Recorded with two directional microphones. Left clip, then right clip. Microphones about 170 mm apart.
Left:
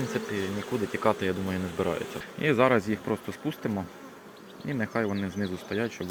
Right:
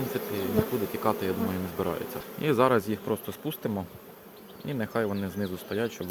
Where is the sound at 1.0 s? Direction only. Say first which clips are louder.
Left 2 dB; 5° left (ahead or behind).